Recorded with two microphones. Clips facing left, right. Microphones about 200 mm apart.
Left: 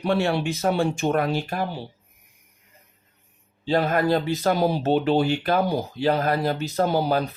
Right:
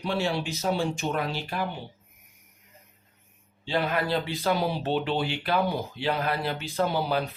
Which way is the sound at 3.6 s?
45° left (ahead or behind).